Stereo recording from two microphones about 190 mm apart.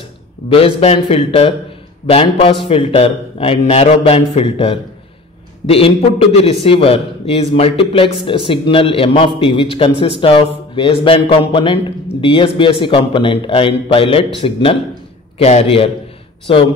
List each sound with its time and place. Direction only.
0.5 s a man's voice: 30° left (ahead or behind)